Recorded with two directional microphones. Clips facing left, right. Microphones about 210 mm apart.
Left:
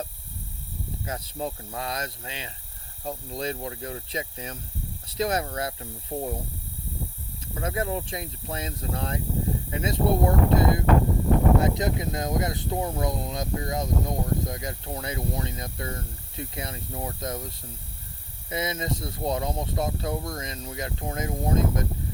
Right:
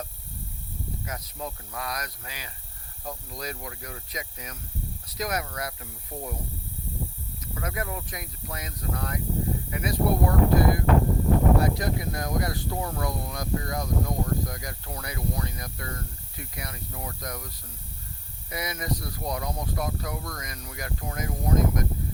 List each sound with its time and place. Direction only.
1.0 s speech: 30° left (ahead or behind)
7.4 s speech: 25° left (ahead or behind)